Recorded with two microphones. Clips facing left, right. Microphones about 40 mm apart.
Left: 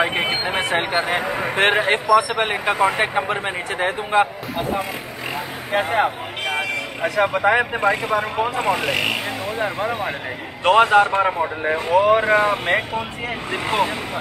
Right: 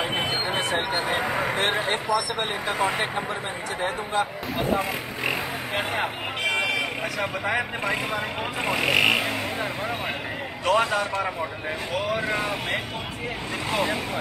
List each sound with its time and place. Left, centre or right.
0.6 s speech: left
1.2 s speech: centre
1.6 s speech: left
5.7 s speech: left
7.2 s speech: left
7.8 s speech: centre
8.4 s speech: centre
9.6 s speech: left
10.6 s speech: left